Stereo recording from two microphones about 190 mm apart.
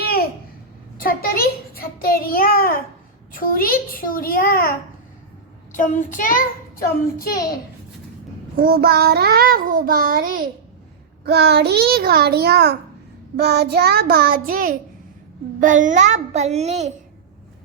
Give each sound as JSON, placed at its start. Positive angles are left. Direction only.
{"t": 0.0, "sound": "a sound", "side_deg": 55}
{"t": 3.3, "sound": "a child's voice", "side_deg": 45}
{"t": 5.7, "sound": "a child's voice", "side_deg": 40}
{"t": 8.5, "sound": "child singing", "side_deg": -50}
{"t": 11.3, "sound": "a child's voice", "side_deg": -55}